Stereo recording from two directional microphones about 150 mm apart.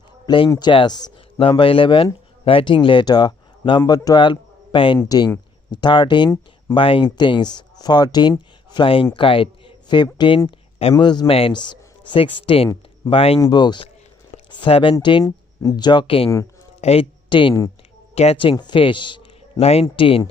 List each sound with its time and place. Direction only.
0.3 s speech: 35° left (ahead or behind)